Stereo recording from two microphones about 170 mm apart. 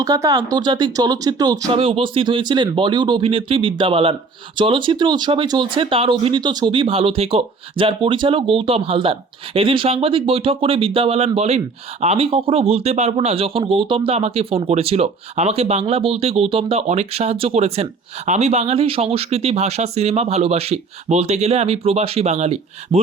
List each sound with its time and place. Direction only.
0.0 s speech: 20° right (ahead or behind)
1.7 s speech: 30° right (ahead or behind)